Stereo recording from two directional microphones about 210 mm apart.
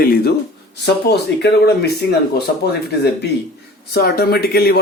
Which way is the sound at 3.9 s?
50° left (ahead or behind).